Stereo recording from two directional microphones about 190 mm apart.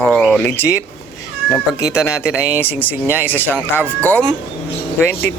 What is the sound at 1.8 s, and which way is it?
Speech, 15° left (ahead or behind).